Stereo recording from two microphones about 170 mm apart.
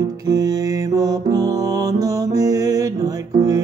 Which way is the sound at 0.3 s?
20° right (ahead or behind).